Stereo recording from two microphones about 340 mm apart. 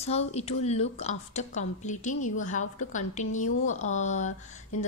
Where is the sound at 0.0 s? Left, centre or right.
Centre.